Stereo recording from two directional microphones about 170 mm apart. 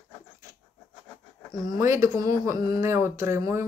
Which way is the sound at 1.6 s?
20° right (ahead or behind).